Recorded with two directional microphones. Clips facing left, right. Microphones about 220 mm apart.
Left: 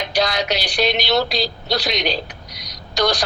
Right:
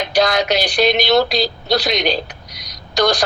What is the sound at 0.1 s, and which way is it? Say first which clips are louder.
A woman's voice: right 5 dB; 50° right (ahead or behind).